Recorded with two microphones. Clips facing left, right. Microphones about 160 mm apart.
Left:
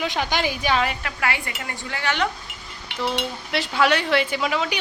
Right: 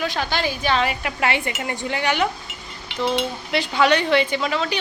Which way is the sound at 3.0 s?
Centre (ahead or behind).